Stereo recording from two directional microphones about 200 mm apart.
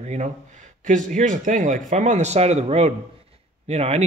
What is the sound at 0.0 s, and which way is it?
Speech, 35° right (ahead or behind).